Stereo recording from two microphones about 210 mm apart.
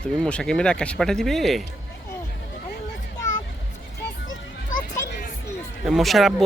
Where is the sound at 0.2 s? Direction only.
5° left (ahead or behind).